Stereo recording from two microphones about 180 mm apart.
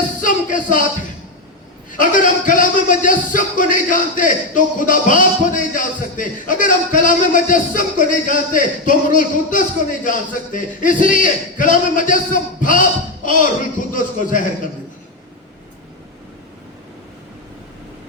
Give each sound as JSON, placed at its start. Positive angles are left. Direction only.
{"t": 0.2, "sound": "music", "side_deg": 45}
{"t": 1.9, "sound": "a man's voice", "side_deg": 45}